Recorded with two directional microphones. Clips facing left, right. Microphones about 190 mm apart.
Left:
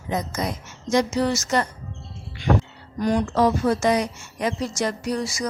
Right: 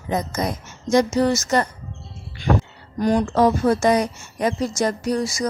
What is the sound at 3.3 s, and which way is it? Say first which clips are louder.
A woman's voice: right 2 dB; 50° right (ahead or behind).